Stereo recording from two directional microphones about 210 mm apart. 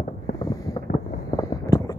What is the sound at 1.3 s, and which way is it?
Vehicle, 15° left (ahead or behind).